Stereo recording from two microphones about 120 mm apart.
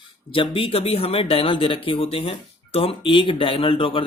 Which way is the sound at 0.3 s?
50° left (ahead or behind).